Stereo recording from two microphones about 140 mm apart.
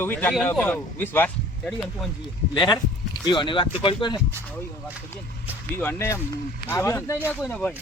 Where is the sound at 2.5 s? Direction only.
30° left (ahead or behind).